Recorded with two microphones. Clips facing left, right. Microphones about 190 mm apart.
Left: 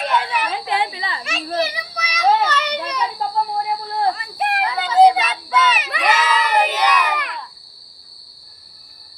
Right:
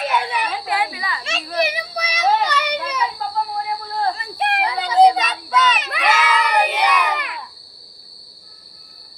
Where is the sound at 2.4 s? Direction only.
10° right (ahead or behind).